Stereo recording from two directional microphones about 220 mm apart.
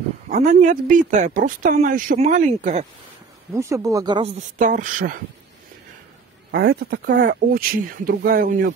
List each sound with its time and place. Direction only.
0.3 s speech: 35° right (ahead or behind)
3.5 s speech: 15° right (ahead or behind)
4.6 s speech: 35° right (ahead or behind)
6.5 s speech: 45° right (ahead or behind)